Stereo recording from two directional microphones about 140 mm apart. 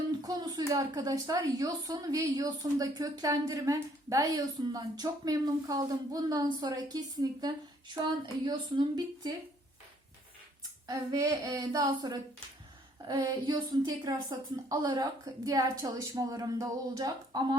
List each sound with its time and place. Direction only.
0.2 s speech: 30° right (ahead or behind)
10.8 s speech: 25° right (ahead or behind)